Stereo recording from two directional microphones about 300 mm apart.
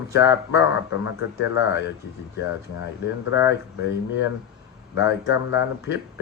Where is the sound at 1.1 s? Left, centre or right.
Left.